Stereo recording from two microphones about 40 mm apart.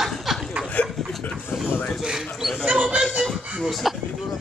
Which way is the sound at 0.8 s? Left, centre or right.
Left.